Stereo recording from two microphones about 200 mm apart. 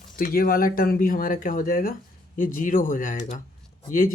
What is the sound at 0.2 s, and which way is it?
Speech, 45° left (ahead or behind).